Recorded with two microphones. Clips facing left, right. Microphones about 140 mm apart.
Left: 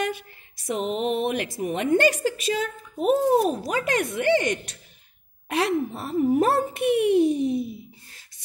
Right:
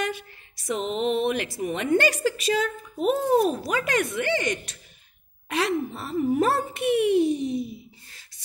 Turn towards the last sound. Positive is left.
turn(degrees=55)  # may be behind; listen again after turning